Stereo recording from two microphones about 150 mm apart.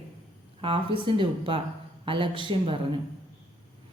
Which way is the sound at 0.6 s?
35° right (ahead or behind).